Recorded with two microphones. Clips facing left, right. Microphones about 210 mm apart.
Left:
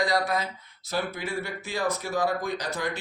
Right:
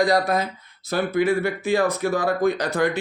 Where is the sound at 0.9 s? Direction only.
55° right (ahead or behind).